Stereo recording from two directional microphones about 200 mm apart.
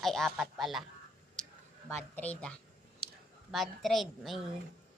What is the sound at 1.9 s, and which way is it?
Speech, 5° left (ahead or behind).